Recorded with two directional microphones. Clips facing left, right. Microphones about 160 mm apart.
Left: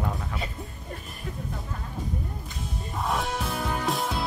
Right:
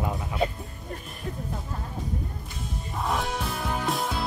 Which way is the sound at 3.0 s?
Centre (ahead or behind).